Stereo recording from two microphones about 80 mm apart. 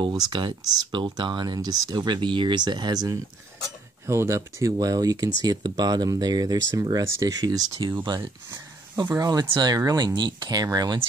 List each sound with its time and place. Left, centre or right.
0.3 s speech: right
0.7 s speech: right
1.0 s speech: right
4.0 s speech: right
4.7 s speech: right
8.0 s speech: right
9.1 s speech: right
9.5 s speech: right
9.8 s speech: right